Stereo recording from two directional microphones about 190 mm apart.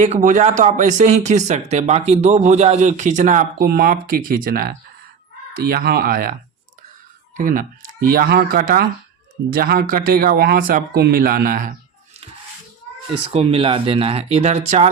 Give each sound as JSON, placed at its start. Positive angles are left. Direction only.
{"t": 0.0, "sound": "speech", "side_deg": -40}
{"t": 7.3, "sound": "speech", "side_deg": -45}
{"t": 13.3, "sound": "speech", "side_deg": -30}